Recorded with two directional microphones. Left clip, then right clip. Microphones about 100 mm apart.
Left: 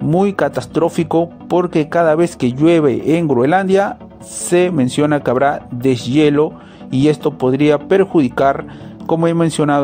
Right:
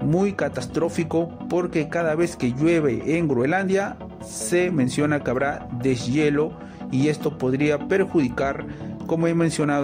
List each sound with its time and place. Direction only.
0.1 s speech: 40° left (ahead or behind)